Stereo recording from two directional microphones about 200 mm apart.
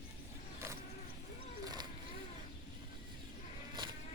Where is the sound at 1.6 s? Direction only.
20° right (ahead or behind).